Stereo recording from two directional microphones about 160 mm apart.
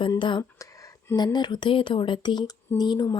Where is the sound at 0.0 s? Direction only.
30° left (ahead or behind).